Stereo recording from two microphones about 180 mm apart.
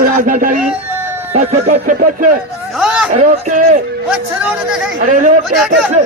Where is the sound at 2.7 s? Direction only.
5° right (ahead or behind).